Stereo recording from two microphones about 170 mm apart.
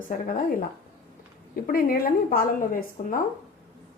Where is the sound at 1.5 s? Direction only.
60° left (ahead or behind).